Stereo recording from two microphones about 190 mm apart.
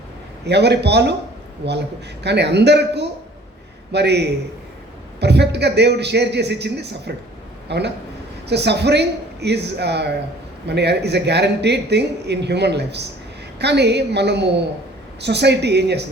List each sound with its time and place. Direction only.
0.4 s a man's voice: 60° right (ahead or behind)